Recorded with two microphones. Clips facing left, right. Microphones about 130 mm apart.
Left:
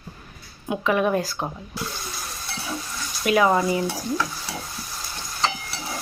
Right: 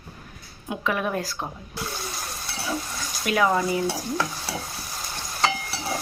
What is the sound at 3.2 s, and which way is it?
Speech, 10° left (ahead or behind).